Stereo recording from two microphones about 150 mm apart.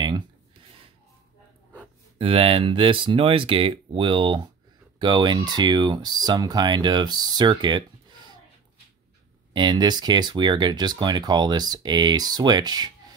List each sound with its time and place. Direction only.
2.1 s speech: 40° right (ahead or behind)
9.5 s speech: 30° right (ahead or behind)